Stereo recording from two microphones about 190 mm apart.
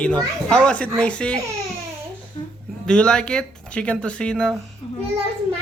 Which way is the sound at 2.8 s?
5° left (ahead or behind).